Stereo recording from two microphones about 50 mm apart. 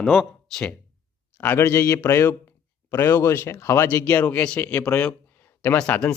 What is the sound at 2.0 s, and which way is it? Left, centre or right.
Speech, left.